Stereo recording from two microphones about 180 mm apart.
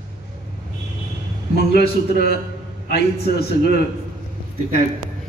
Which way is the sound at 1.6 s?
60° left (ahead or behind).